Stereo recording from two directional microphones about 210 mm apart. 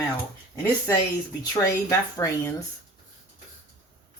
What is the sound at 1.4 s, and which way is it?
Speech, 15° left (ahead or behind).